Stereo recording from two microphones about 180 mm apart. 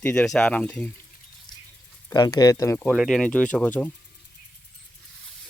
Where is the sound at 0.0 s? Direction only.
10° left (ahead or behind).